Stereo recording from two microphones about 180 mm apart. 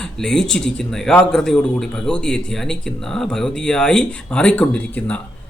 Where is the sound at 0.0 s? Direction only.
5° left (ahead or behind).